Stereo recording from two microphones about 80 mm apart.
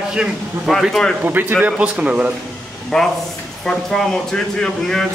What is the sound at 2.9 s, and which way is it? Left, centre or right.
Speech, centre.